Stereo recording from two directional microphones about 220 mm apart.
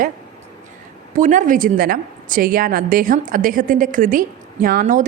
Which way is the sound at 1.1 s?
35° right (ahead or behind).